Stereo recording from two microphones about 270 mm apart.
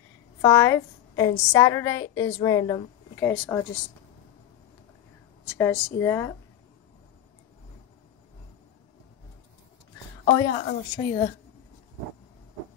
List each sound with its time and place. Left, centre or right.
0.4 s a woman's voice: centre
5.5 s a woman's voice: centre
10.2 s a woman's voice: centre